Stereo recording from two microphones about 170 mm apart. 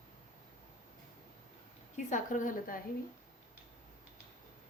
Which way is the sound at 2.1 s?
50° left (ahead or behind).